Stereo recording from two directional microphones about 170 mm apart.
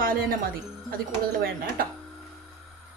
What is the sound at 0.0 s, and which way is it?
Speech, 55° right (ahead or behind).